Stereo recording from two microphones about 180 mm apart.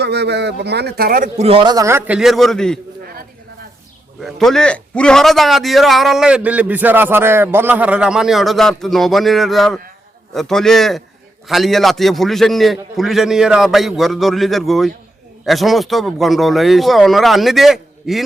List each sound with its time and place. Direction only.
0.0 s speech: 70° right (ahead or behind); by 1.5 s 50° right (ahead or behind)
1.5 s a man's voice: 25° right (ahead or behind); by 2.7 s centre (ahead or behind)
4.2 s a man's voice: centre (ahead or behind)